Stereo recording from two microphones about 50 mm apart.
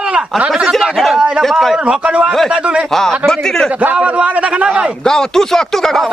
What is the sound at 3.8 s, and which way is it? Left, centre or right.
Speech, right.